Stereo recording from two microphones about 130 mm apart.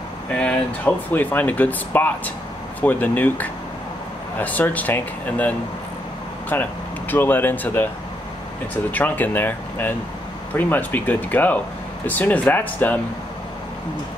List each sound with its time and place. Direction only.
0.4 s speech: 10° left (ahead or behind)
6.5 s speech: 15° left (ahead or behind)
8.9 s speech: 15° left (ahead or behind)